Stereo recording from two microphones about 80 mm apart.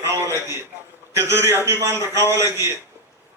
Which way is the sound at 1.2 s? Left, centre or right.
Right.